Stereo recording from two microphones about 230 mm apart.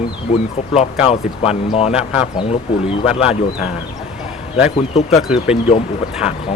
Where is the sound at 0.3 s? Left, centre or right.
Left.